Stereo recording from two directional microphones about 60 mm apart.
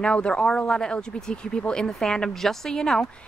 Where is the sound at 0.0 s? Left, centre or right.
Centre.